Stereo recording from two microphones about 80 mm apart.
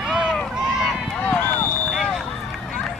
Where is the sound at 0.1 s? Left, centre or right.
Centre.